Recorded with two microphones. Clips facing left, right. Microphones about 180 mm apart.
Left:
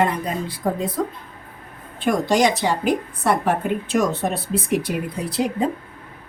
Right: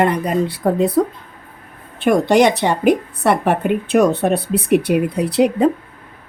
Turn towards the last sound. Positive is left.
turn(degrees=-70)  # may be behind; listen again after turning